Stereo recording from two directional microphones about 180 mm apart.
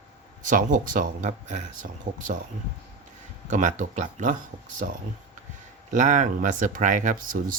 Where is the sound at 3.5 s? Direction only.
45° right (ahead or behind).